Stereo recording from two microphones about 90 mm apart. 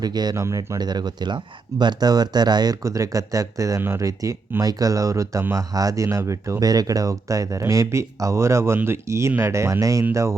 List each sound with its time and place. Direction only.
0.0 s speech: 50° right (ahead or behind)
0.3 s speech: 35° right (ahead or behind)
0.8 s speech: 50° right (ahead or behind)
2.8 s speech: 40° right (ahead or behind)
3.8 s speech: 25° right (ahead or behind)
4.0 s speech: 40° right (ahead or behind)